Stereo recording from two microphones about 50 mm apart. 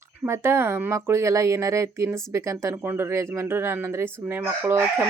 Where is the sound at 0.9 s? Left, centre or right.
Right.